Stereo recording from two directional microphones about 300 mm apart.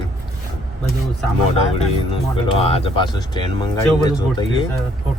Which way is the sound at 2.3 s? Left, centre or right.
Centre.